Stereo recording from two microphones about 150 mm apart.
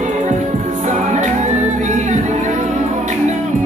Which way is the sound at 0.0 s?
55° right (ahead or behind).